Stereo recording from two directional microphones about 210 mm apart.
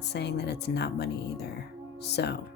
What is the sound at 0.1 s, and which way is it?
A woman's voice, 55° left (ahead or behind).